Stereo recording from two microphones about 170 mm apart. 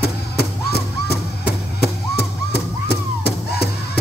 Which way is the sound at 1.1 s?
70° left (ahead or behind).